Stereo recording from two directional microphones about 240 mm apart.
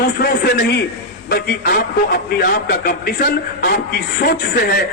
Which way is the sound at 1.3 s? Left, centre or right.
Left.